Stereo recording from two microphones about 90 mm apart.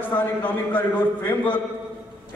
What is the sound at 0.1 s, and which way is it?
A man's voice, 20° left (ahead or behind).